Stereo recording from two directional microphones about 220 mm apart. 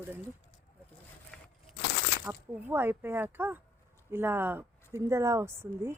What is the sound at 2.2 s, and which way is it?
Speech, 5° right (ahead or behind).